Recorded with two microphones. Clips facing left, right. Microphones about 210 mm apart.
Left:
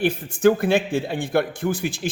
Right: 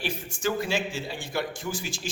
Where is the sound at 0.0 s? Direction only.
55° left (ahead or behind).